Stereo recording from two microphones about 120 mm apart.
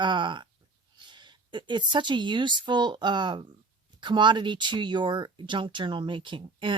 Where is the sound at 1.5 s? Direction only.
40° right (ahead or behind).